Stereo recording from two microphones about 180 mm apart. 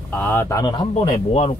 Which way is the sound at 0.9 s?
40° left (ahead or behind).